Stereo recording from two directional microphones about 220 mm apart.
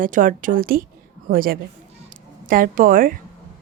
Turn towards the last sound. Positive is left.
turn(degrees=-40)  # may be behind; listen again after turning